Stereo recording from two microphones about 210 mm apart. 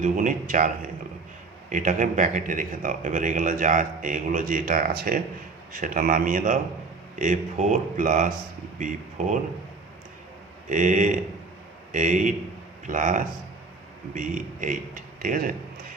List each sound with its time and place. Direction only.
0.0 s speech: 40° right (ahead or behind)
10.7 s a man's voice: 35° right (ahead or behind)